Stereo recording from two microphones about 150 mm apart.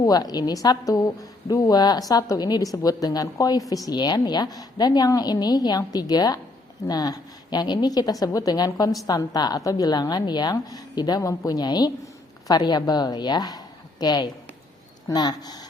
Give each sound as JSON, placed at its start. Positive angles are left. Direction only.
{"t": 0.0, "sound": "a woman's voice", "side_deg": 25}